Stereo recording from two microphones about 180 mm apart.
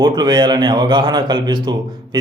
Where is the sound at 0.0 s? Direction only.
25° right (ahead or behind).